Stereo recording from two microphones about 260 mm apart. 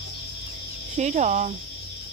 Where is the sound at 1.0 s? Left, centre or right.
Right.